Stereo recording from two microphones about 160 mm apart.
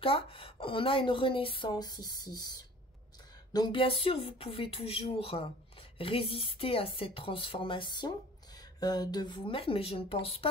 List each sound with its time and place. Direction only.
0.0 s speech: 35° left (ahead or behind)
3.5 s speech: 30° left (ahead or behind)